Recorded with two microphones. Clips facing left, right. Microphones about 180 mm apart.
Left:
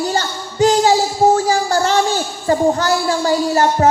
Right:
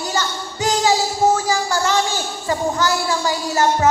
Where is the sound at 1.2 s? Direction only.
55° left (ahead or behind).